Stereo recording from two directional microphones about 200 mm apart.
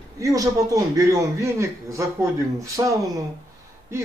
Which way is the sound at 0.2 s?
15° right (ahead or behind).